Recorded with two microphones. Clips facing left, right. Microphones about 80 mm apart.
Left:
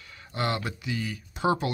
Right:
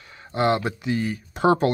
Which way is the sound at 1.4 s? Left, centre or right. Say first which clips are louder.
Right 7 dB; right.